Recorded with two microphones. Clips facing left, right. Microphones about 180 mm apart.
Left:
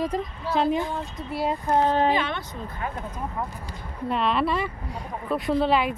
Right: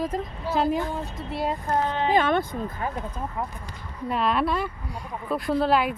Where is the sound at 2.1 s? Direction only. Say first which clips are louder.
Right 5 dB; 50° right (ahead or behind).